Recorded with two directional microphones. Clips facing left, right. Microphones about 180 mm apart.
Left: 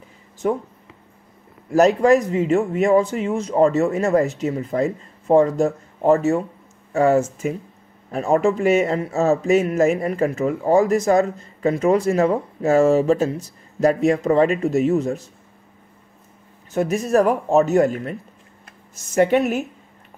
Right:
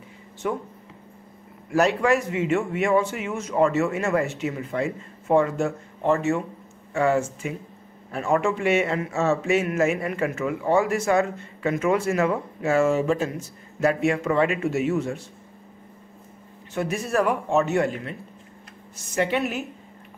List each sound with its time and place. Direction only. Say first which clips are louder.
0.4 s a man's voice: left 6 dB; 40° left (ahead or behind)
1.7 s a man's voice: left 6 dB; 40° left (ahead or behind)
16.7 s a man's voice: left 6 dB; 40° left (ahead or behind)